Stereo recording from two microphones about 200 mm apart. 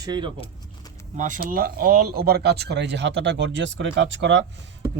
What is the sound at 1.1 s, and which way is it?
Speech, 40° right (ahead or behind).